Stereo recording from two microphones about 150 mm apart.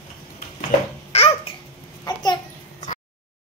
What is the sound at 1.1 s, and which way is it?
Babbling, 45° left (ahead or behind).